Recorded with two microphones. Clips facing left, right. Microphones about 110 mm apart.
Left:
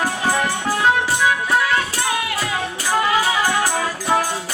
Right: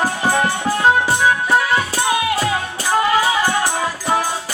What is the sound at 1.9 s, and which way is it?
Music, 25° right (ahead or behind).